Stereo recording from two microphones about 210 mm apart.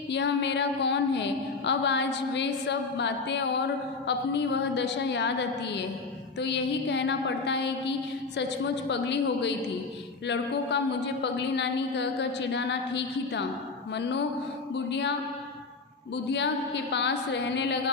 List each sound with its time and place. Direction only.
0.1 s a woman's voice: 60° left (ahead or behind)
16.3 s a woman's voice: 55° left (ahead or behind)